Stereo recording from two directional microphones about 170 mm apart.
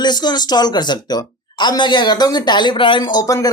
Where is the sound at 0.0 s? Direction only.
25° left (ahead or behind).